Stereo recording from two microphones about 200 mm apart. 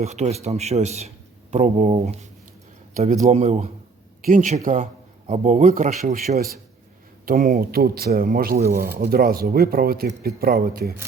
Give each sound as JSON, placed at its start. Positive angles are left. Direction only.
{"t": 0.0, "sound": "a man's voice", "side_deg": -35}